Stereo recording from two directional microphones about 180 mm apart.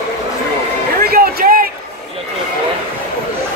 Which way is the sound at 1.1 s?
50° right (ahead or behind).